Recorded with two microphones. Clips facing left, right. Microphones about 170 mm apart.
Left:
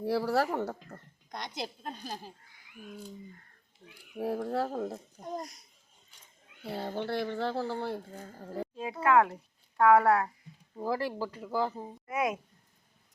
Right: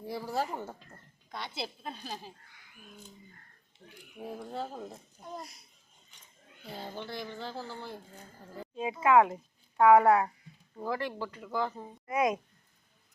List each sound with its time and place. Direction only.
0.0 s a woman's voice: 75° left (ahead or behind)
1.3 s a woman's voice: 15° left (ahead or behind)
4.2 s a woman's voice: 70° left (ahead or behind)
5.2 s a child's voice: 45° left (ahead or behind)
6.7 s speech: 65° left (ahead or behind)
8.7 s a sound: centre (ahead or behind)
9.0 s speech: 5° right (ahead or behind)
10.8 s speech: 35° left (ahead or behind)
11.6 s speech: 5° left (ahead or behind)